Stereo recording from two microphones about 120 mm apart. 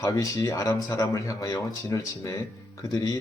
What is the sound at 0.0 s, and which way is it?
Speech, 25° left (ahead or behind).